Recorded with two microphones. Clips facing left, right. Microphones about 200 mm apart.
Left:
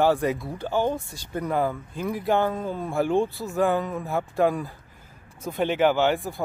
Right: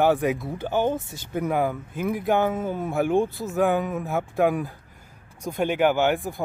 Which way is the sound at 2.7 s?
20° right (ahead or behind).